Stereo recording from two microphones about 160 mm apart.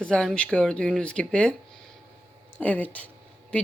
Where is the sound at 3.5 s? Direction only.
10° left (ahead or behind).